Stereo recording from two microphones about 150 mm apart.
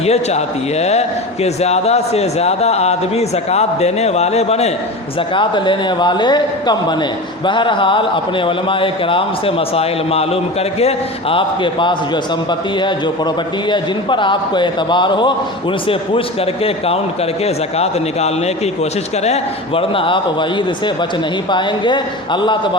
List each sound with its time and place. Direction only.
0.0 s a man's voice: 45° left (ahead or behind)
5.3 s speech: 30° left (ahead or behind)
16.6 s speech: 40° left (ahead or behind)